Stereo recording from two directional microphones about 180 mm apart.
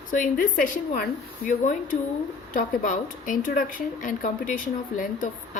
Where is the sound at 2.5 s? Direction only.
45° left (ahead or behind).